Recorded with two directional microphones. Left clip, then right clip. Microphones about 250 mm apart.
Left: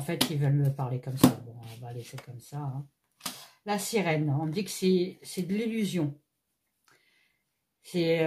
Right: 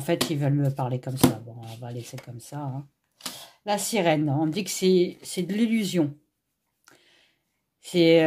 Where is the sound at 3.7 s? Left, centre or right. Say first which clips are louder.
Right 5 dB; right.